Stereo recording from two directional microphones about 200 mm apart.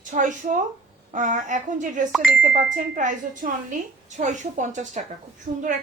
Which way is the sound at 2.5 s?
40° right (ahead or behind).